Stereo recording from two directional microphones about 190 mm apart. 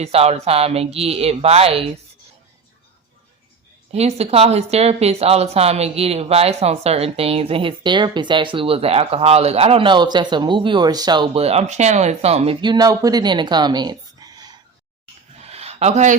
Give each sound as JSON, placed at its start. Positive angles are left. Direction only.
{"t": 0.0, "sound": "speech", "side_deg": -35}
{"t": 3.9, "sound": "speech", "side_deg": -35}
{"t": 15.4, "sound": "a sound", "side_deg": -35}